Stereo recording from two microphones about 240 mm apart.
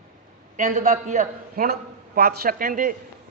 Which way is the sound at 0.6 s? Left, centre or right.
Right.